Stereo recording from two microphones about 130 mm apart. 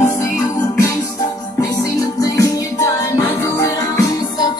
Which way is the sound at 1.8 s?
30° left (ahead or behind).